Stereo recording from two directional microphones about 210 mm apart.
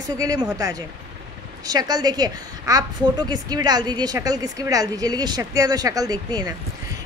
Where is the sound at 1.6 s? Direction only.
20° right (ahead or behind).